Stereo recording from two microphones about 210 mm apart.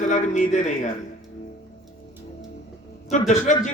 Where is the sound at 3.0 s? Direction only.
35° left (ahead or behind).